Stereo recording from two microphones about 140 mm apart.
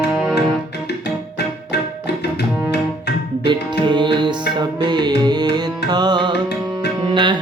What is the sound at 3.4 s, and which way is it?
Music, 35° right (ahead or behind).